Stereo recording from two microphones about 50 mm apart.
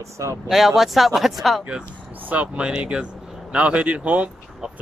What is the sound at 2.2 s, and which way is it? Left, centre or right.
Speech, right.